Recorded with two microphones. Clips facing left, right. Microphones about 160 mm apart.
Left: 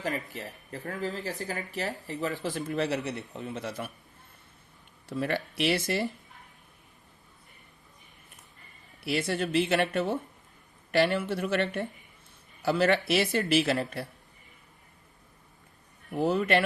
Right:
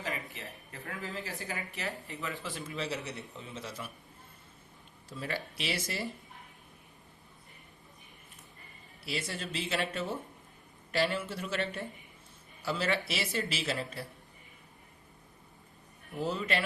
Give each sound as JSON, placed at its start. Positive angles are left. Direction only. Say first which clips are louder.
{"t": 0.0, "sound": "speech", "louder": "left 6 dB", "side_deg": 40}
{"t": 2.6, "sound": "speech", "louder": "left 8 dB", "side_deg": 60}
{"t": 5.0, "sound": "speech", "louder": "left 8 dB", "side_deg": 60}
{"t": 9.0, "sound": "speech", "louder": "left 9 dB", "side_deg": 65}
{"t": 16.1, "sound": "speech", "louder": "left 8 dB", "side_deg": 65}